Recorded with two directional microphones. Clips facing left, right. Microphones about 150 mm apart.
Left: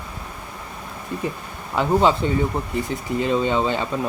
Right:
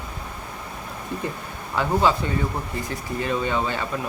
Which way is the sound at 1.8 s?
15° left (ahead or behind).